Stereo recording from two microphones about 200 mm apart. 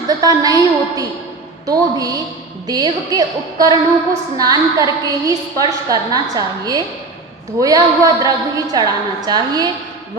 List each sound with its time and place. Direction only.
0.2 s a woman's voice: 20° right (ahead or behind)